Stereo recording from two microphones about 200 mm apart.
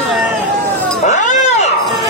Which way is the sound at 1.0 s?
35° left (ahead or behind).